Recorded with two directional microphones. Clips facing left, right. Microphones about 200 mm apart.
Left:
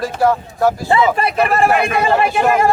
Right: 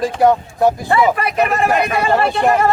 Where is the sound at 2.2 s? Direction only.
10° left (ahead or behind).